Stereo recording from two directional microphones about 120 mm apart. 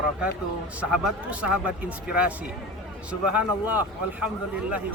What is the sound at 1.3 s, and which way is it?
Speech, 10° right (ahead or behind).